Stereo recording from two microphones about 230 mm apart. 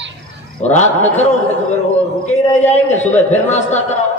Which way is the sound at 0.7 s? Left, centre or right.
Left.